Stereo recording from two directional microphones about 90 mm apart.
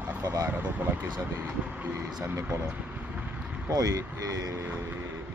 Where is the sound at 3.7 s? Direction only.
40° right (ahead or behind).